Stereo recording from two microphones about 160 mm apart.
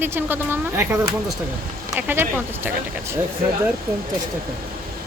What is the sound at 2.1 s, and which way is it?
Speech, 15° right (ahead or behind).